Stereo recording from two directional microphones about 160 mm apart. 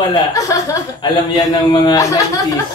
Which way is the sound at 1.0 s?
25° left (ahead or behind).